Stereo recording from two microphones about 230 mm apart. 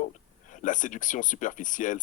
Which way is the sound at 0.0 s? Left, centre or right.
Left.